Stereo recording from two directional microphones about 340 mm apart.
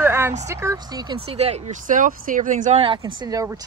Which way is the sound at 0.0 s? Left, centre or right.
Centre.